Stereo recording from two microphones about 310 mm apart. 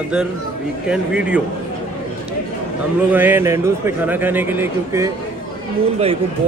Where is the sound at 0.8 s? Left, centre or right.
Centre.